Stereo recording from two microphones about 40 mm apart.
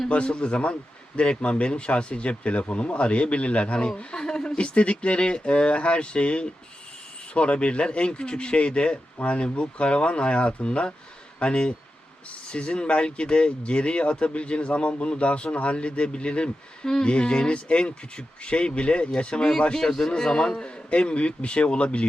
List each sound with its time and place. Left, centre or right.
0.1 s a man's voice: left
20.9 s a man's voice: left